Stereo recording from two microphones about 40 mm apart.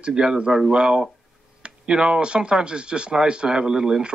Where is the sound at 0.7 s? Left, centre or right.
Right.